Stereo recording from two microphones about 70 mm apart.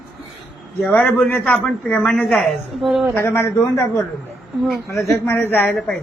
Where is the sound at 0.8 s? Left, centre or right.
Centre.